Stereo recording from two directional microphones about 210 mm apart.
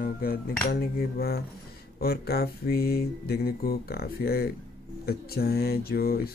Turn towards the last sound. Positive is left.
turn(degrees=45)  # may be behind; listen again after turning